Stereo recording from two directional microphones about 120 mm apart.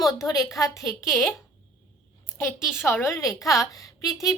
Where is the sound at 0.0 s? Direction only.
30° left (ahead or behind).